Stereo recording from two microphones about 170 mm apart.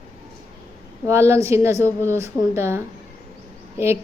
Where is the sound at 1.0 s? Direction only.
15° right (ahead or behind).